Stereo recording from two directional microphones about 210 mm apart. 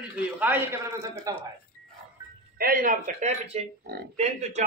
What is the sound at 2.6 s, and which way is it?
A man's voice, 40° right (ahead or behind).